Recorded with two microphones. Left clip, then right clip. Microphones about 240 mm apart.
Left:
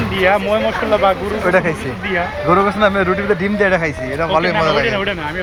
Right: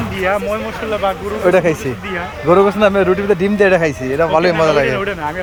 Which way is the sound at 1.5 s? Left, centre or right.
Right.